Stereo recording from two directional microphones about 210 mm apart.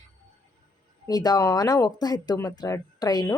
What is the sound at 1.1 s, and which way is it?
Speech, 20° left (ahead or behind).